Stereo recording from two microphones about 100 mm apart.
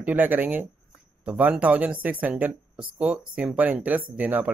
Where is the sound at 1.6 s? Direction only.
15° right (ahead or behind).